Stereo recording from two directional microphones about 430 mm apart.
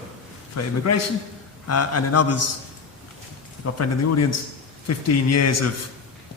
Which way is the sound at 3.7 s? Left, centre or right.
Left.